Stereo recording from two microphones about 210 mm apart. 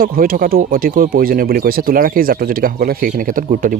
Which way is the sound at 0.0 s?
45° right (ahead or behind).